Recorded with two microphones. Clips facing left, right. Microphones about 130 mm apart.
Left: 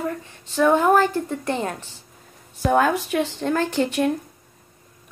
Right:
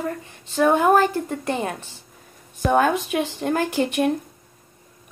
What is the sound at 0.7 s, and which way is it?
Speech, 15° right (ahead or behind).